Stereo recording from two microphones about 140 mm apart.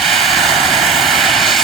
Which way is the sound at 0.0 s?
Centre (ahead or behind).